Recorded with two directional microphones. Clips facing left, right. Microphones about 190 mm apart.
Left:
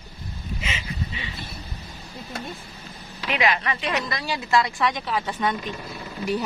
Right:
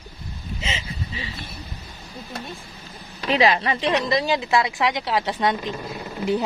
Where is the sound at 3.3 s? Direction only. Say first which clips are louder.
Right 5 dB; 30° right (ahead or behind).